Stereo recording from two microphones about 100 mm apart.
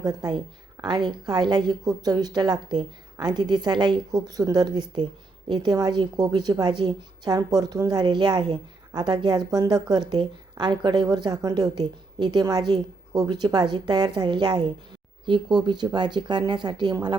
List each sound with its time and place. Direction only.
0.0 s a woman's voice: 40° right (ahead or behind)